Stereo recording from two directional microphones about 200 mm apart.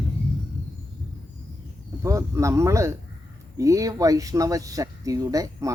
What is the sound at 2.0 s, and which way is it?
Speech, 15° right (ahead or behind).